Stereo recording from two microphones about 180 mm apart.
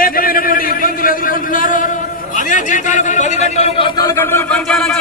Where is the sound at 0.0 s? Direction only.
55° left (ahead or behind).